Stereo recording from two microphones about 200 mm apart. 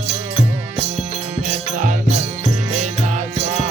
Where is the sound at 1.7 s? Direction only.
40° right (ahead or behind).